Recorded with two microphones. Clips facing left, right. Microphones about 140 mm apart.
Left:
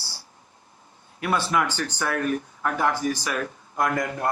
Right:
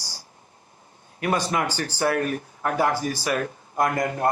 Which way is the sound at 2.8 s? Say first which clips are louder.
Even; 40° right (ahead or behind).